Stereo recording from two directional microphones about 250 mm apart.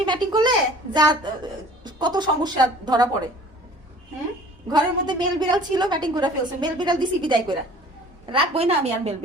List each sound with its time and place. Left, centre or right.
0.0 s a woman's voice: centre
4.7 s a woman's voice: centre